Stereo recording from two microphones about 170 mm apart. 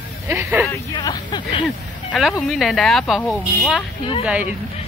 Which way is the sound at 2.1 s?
Centre (ahead or behind).